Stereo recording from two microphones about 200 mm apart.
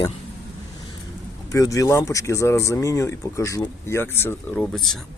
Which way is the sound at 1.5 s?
15° left (ahead or behind).